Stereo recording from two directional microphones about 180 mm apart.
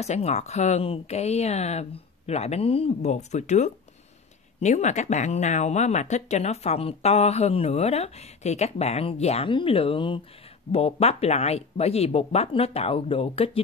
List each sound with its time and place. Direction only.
0.0 s speech: 35° left (ahead or behind)